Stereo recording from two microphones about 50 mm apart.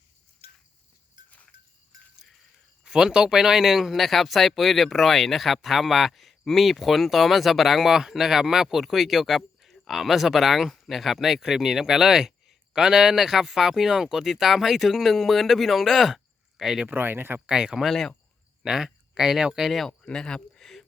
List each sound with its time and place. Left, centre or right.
2.8 s speech: centre
16.9 s speech: right
17.5 s speech: centre
17.8 s speech: centre
18.6 s speech: centre
19.9 s a sound: centre